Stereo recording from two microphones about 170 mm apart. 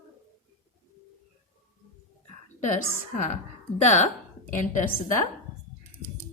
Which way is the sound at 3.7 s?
45° left (ahead or behind).